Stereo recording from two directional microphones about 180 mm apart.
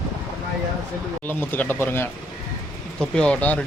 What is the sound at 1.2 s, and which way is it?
Speech, 10° left (ahead or behind).